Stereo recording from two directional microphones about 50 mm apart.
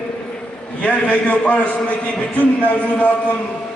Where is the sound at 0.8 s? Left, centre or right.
Left.